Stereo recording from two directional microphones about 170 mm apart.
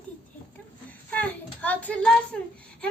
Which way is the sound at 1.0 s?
10° left (ahead or behind).